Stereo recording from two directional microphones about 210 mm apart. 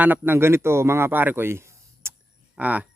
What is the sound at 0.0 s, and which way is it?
Speech, 10° right (ahead or behind).